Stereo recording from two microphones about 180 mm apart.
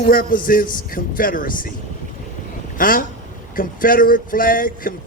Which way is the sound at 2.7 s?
50° left (ahead or behind).